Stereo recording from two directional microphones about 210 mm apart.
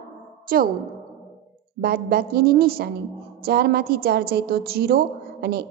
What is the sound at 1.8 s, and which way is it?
A woman's voice, 50° right (ahead or behind).